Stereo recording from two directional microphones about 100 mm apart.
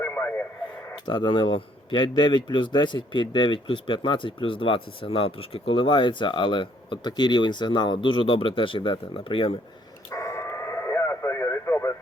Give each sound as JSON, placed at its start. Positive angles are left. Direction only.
{"t": 0.0, "sound": "radio", "side_deg": 20}
{"t": 1.0, "sound": "speech", "side_deg": 50}
{"t": 10.1, "sound": "radio", "side_deg": 30}